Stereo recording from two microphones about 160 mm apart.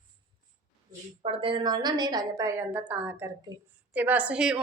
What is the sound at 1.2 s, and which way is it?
A woman's voice, 35° right (ahead or behind).